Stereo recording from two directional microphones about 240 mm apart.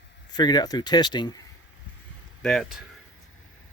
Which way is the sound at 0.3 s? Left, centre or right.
Centre.